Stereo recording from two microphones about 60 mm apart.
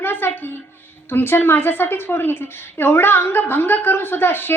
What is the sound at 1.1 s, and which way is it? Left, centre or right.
A woman's voice, left.